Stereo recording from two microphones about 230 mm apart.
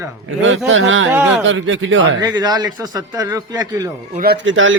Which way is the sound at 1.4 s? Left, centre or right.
Right.